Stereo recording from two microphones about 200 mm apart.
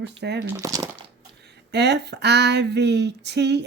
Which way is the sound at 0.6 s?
15° right (ahead or behind).